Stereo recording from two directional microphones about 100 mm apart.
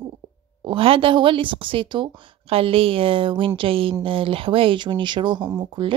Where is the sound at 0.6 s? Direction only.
60° right (ahead or behind).